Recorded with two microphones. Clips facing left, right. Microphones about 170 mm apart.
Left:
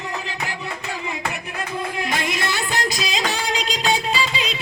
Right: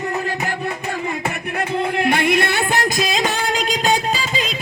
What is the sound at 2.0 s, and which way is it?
Music, 60° right (ahead or behind).